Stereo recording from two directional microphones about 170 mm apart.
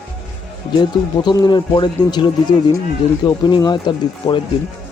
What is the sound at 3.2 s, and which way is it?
A man's voice, 25° left (ahead or behind).